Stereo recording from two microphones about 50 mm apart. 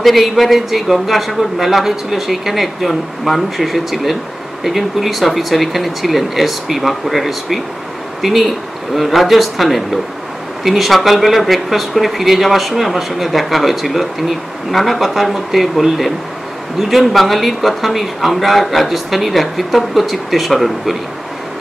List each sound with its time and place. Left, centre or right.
0.0 s a man's voice: centre